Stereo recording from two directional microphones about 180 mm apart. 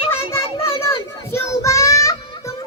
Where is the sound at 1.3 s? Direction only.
15° left (ahead or behind).